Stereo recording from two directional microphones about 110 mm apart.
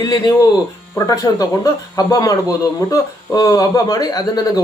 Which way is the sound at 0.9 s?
30° left (ahead or behind).